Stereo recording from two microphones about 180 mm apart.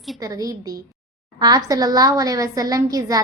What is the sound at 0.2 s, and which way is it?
A woman's voice, 20° right (ahead or behind).